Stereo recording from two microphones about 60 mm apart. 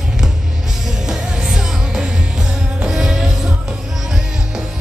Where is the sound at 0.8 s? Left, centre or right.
Centre.